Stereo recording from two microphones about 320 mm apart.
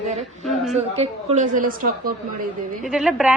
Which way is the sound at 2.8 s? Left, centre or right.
Centre.